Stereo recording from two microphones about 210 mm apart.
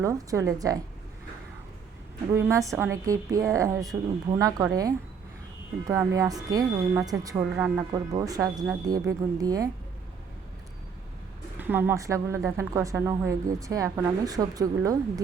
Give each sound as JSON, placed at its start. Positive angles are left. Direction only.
{"t": 0.0, "sound": "a woman's voice", "side_deg": -15}
{"t": 2.3, "sound": "a woman's voice", "side_deg": -15}
{"t": 11.5, "sound": "a woman's voice", "side_deg": -10}